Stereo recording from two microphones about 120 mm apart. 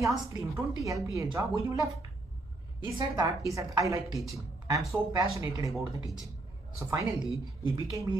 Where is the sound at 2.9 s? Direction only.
30° right (ahead or behind).